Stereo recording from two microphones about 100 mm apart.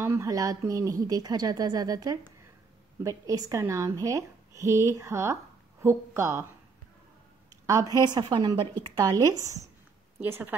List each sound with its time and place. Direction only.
0.0 s speech: 30° right (ahead or behind)
7.6 s speech: 35° right (ahead or behind)
10.2 s a woman's voice: 25° right (ahead or behind)